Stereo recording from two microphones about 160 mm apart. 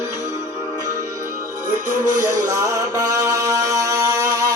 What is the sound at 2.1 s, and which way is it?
Music, 20° right (ahead or behind).